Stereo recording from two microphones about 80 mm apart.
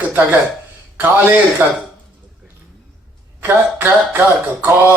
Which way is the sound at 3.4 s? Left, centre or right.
Right.